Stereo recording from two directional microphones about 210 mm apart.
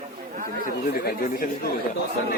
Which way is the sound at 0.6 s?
45° left (ahead or behind).